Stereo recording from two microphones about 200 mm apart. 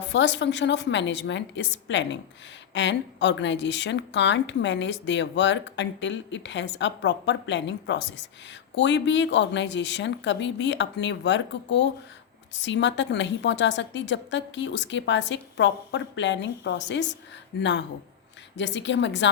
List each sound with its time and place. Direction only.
0.1 s a woman's voice: 60° left (ahead or behind)